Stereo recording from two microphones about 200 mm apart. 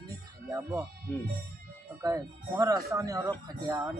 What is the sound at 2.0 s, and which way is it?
Speech, 15° right (ahead or behind).